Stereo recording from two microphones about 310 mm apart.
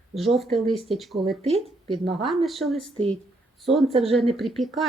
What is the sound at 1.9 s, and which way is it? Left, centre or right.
Speech, centre.